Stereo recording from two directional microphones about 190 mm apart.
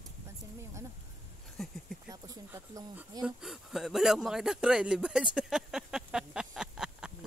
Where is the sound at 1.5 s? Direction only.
Centre (ahead or behind).